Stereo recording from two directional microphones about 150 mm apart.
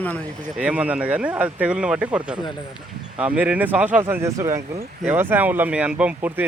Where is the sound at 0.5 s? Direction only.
10° right (ahead or behind).